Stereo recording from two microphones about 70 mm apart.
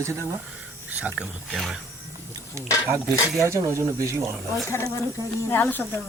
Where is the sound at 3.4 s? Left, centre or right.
Right.